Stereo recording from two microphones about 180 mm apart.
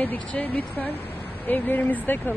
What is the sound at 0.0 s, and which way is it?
A woman's voice, 10° left (ahead or behind).